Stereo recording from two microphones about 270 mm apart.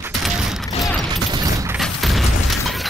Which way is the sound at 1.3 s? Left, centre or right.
Centre.